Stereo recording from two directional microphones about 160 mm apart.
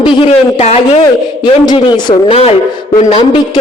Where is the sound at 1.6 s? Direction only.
25° left (ahead or behind).